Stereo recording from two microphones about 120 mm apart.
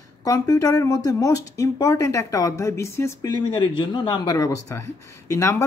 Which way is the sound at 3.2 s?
40° left (ahead or behind).